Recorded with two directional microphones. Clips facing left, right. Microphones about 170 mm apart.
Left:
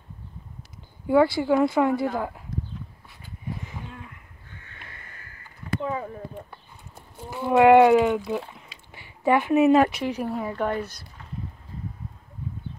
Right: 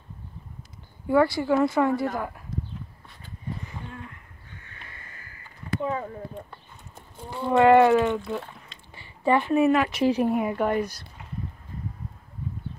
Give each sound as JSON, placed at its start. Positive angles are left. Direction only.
{"t": 1.0, "sound": "speech", "side_deg": 15}
{"t": 5.9, "sound": "speech", "side_deg": 10}
{"t": 10.0, "sound": "speech", "side_deg": -30}
{"t": 10.3, "sound": "speech", "side_deg": -10}